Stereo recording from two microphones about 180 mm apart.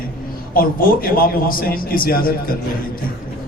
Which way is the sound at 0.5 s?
50° left (ahead or behind).